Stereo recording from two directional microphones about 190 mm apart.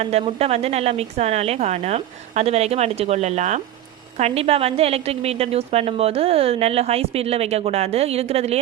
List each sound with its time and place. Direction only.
0.0 s a woman's voice: 35° right (ahead or behind)